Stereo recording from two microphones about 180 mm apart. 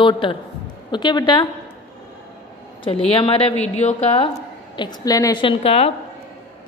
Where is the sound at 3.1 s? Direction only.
30° left (ahead or behind).